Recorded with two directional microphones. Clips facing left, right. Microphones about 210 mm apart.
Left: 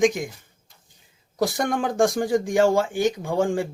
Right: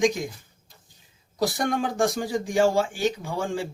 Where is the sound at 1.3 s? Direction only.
50° left (ahead or behind).